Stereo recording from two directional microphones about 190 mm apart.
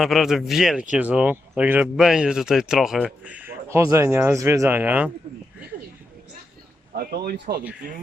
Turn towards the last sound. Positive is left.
turn(degrees=-55)  # may be behind; listen again after turning